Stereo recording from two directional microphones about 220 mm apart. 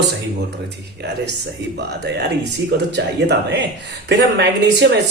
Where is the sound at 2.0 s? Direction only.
50° right (ahead or behind).